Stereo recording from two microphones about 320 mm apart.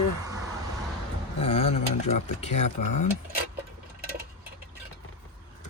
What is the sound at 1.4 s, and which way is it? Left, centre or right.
Speech, centre.